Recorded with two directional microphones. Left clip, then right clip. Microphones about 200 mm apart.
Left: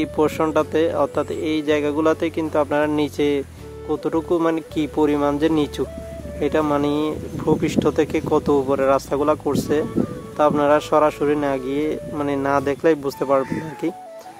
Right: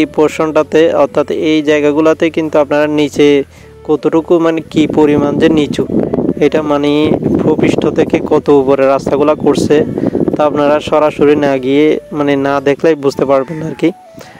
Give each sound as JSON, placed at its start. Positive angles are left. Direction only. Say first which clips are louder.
{"t": 0.0, "sound": "speech", "louder": "right 9 dB", "side_deg": -35}